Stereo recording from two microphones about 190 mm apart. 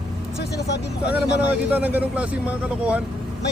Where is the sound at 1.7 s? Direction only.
10° right (ahead or behind).